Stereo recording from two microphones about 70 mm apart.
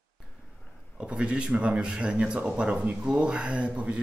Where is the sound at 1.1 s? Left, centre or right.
Centre.